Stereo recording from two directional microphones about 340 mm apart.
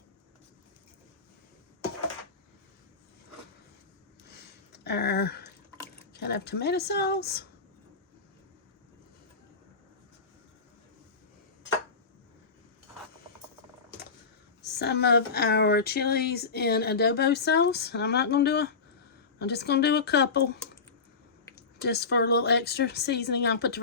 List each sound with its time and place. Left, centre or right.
4.7 s a sound: left
6.1 s speech: left
14.6 s speech: left
21.8 s speech: left